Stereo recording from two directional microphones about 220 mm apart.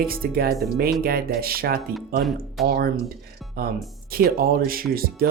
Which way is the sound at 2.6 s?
45° right (ahead or behind).